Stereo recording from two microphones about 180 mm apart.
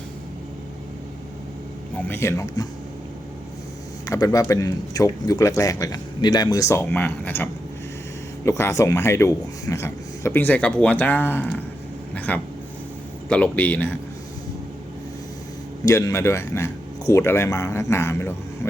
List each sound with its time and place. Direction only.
2.0 s speech: 10° left (ahead or behind)
4.0 s speech: 20° left (ahead or behind)
15.9 s speech: 15° left (ahead or behind)